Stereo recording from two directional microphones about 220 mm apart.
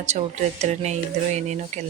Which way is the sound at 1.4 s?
30° right (ahead or behind).